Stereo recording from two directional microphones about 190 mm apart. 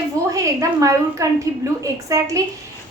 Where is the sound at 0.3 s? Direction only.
20° right (ahead or behind).